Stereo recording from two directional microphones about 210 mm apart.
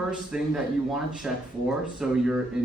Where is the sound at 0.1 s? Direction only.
5° right (ahead or behind).